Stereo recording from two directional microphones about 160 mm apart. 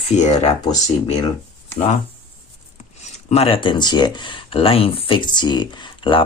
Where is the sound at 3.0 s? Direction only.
40° left (ahead or behind).